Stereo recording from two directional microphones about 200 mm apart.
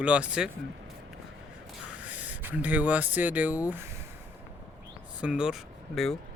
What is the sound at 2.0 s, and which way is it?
Speech, 5° right (ahead or behind).